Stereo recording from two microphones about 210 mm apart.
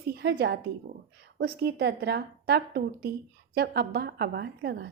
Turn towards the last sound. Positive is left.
turn(degrees=-50)  # may be behind; listen again after turning